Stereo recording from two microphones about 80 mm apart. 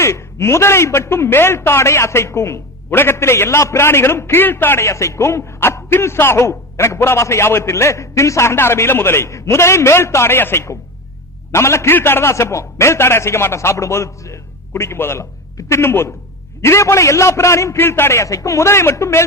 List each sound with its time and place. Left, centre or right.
0.0 s a man's voice: left